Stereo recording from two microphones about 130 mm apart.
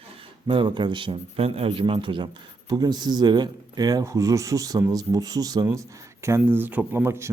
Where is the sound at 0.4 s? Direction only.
40° right (ahead or behind).